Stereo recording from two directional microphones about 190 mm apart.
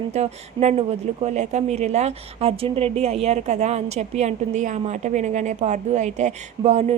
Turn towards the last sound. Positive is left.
turn(degrees=-35)  # may be behind; listen again after turning